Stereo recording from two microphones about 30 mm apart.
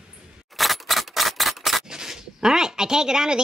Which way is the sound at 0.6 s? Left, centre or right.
Centre.